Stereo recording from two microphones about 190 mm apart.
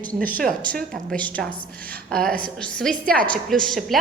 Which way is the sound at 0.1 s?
45° right (ahead or behind).